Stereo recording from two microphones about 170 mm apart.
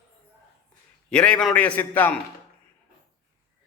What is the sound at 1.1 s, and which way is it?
A man's voice, 5° left (ahead or behind).